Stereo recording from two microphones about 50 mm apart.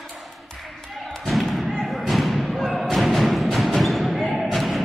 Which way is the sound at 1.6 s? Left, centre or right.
Centre.